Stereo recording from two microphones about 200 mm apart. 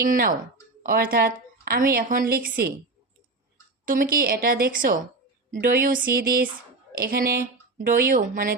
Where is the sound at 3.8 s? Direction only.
45° right (ahead or behind).